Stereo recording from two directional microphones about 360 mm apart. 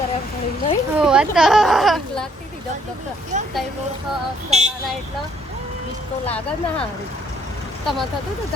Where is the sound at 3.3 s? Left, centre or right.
Centre.